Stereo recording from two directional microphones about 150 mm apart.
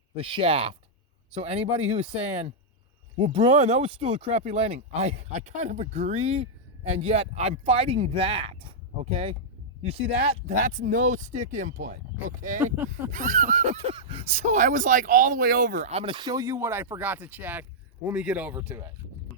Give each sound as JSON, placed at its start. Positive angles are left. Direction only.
{"t": 0.2, "sound": "speech", "side_deg": -35}
{"t": 3.6, "sound": "speech", "side_deg": -45}
{"t": 12.5, "sound": "speech", "side_deg": -15}
{"t": 13.1, "sound": "speech", "side_deg": -60}